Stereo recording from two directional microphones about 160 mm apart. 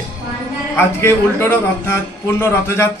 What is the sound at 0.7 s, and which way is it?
Speech, 15° left (ahead or behind).